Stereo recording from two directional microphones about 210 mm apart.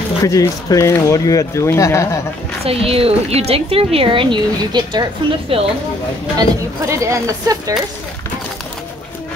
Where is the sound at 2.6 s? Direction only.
25° right (ahead or behind).